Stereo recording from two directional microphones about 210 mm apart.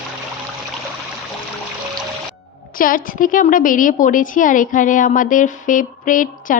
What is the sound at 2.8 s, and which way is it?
A woman's voice, 40° left (ahead or behind).